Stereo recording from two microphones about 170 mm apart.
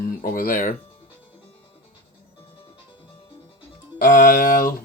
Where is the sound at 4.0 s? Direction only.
50° left (ahead or behind).